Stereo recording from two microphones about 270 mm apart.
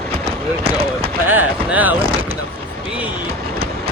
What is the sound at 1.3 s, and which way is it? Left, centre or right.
Speech, centre.